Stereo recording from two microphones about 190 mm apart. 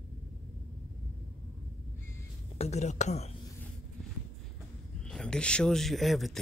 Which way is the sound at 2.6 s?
35° left (ahead or behind).